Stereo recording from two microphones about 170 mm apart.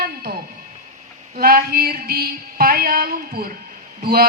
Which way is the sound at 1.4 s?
60° right (ahead or behind).